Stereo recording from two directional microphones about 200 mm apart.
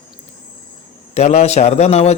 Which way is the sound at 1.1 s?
35° left (ahead or behind).